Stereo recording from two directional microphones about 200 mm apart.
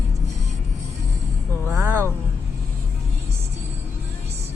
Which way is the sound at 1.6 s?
10° right (ahead or behind).